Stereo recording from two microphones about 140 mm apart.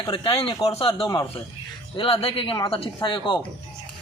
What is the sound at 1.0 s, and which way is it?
Speech, 25° left (ahead or behind).